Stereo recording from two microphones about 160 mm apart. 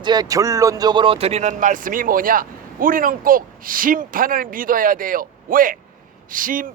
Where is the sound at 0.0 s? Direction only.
25° right (ahead or behind).